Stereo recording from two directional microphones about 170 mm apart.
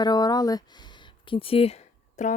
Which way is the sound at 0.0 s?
25° left (ahead or behind).